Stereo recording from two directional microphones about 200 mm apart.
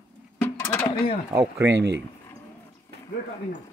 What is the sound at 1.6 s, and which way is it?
Speech, 60° right (ahead or behind).